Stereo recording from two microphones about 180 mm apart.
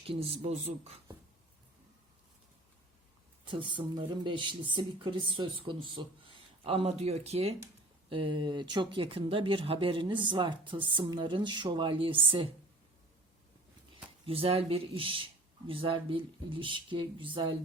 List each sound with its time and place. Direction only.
0.1 s speech: 35° right (ahead or behind)
3.4 s speech: 25° right (ahead or behind)
13.9 s speech: 30° right (ahead or behind)